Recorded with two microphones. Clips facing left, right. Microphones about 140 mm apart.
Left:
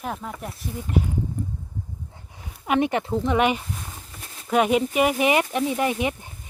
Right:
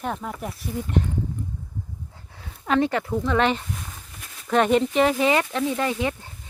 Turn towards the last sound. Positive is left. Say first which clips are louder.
# left 1 dB
turn(degrees=15)  # may be behind; listen again after turning